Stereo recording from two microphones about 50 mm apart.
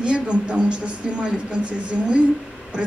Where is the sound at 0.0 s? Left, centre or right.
Right.